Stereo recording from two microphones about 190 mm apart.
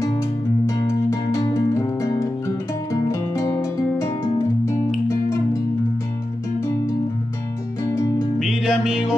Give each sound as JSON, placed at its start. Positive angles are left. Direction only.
{"t": 0.7, "sound": "music", "side_deg": 15}
{"t": 4.0, "sound": "guitar", "side_deg": 15}
{"t": 5.0, "sound": "music", "side_deg": 15}
{"t": 8.4, "sound": "music", "side_deg": -5}